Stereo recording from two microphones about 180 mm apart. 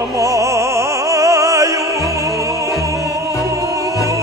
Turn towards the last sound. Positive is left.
turn(degrees=-20)  # may be behind; listen again after turning